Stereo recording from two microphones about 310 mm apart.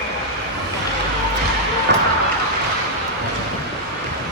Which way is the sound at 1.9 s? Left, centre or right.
Right.